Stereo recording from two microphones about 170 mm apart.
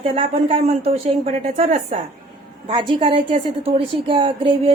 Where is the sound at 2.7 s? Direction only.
30° right (ahead or behind).